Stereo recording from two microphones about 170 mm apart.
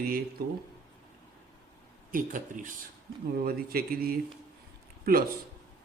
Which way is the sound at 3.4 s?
60° right (ahead or behind).